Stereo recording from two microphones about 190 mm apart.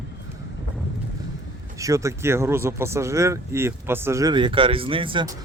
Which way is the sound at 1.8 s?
15° right (ahead or behind).